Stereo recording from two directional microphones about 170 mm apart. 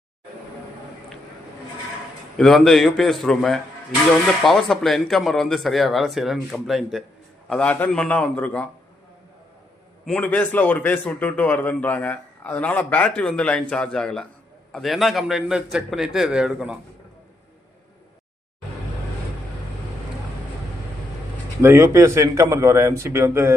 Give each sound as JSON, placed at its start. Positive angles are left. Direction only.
{"t": 2.4, "sound": "a man's voice", "side_deg": 0}
{"t": 10.1, "sound": "a man's voice", "side_deg": 10}
{"t": 21.6, "sound": "a man's voice", "side_deg": -15}